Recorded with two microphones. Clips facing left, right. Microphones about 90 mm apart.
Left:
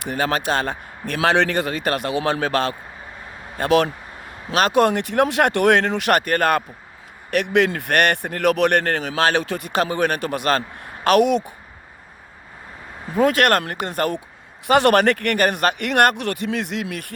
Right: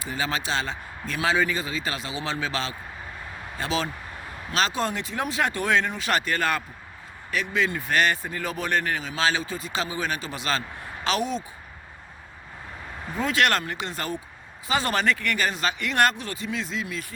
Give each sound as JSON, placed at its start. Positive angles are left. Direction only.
{"t": 0.0, "sound": "speech", "side_deg": 60}
{"t": 7.3, "sound": "speech", "side_deg": 65}
{"t": 13.1, "sound": "speech", "side_deg": 50}